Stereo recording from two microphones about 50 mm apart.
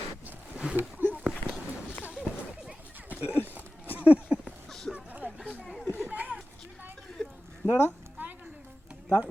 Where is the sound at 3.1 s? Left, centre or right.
Right.